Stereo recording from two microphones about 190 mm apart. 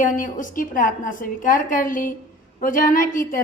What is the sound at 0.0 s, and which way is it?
A woman's voice, 45° left (ahead or behind).